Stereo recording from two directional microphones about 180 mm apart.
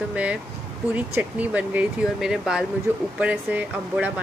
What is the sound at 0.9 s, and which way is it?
Speech, 10° right (ahead or behind).